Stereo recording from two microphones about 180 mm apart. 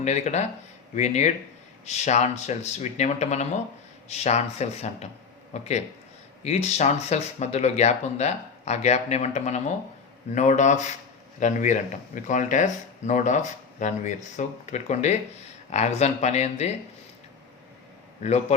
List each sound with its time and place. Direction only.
0.0 s speech: 40° left (ahead or behind)
18.2 s speech: 40° left (ahead or behind)